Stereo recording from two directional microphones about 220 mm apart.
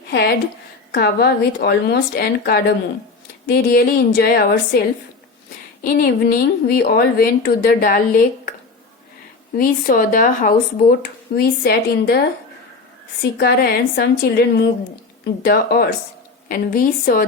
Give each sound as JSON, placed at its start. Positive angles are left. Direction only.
{"t": 0.1, "sound": "a woman's voice", "side_deg": 50}
{"t": 5.8, "sound": "a woman's voice", "side_deg": 40}
{"t": 9.6, "sound": "a woman's voice", "side_deg": 40}
{"t": 13.4, "sound": "a woman's voice", "side_deg": 45}
{"t": 15.4, "sound": "a woman's voice", "side_deg": 40}